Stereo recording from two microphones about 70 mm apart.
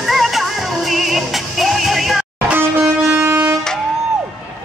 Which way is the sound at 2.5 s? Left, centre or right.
Right.